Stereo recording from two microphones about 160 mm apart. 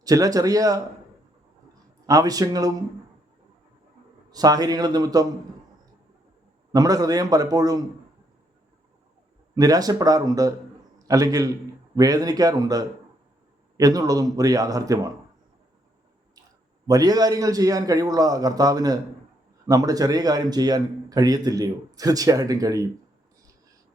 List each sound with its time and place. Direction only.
0.0 s a man's voice: 20° right (ahead or behind)
2.0 s a man's voice: 25° right (ahead or behind)
4.3 s a man's voice: 25° right (ahead or behind)
6.7 s a man's voice: 25° right (ahead or behind)
9.6 s a man's voice: 25° right (ahead or behind)
16.8 s a man's voice: 20° right (ahead or behind)